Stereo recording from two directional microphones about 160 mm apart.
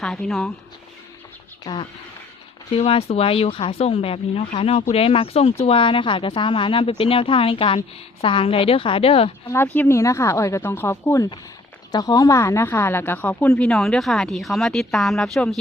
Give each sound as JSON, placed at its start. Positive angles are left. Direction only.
{"t": 0.0, "sound": "speech", "side_deg": 0}
{"t": 2.7, "sound": "speech", "side_deg": 35}
{"t": 9.5, "sound": "speech", "side_deg": 15}